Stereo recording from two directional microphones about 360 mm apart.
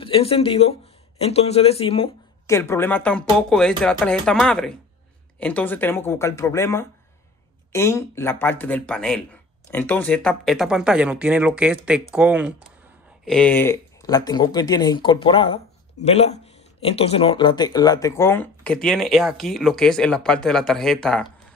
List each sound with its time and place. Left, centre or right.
0.0 s speech: centre